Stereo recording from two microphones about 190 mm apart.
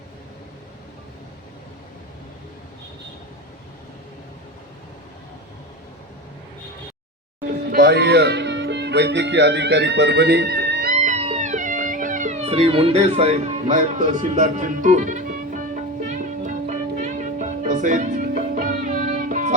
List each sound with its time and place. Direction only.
7.7 s speech: 55° right (ahead or behind)
10.9 s music: 35° right (ahead or behind)